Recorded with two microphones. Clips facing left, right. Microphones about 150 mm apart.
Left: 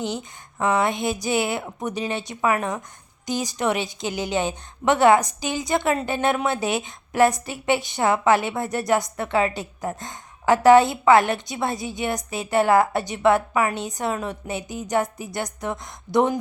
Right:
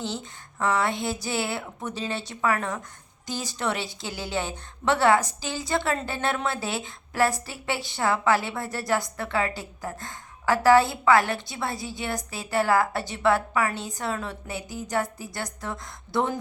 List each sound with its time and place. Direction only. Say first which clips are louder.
0.0 s a woman's voice: left 4 dB; 15° left (ahead or behind)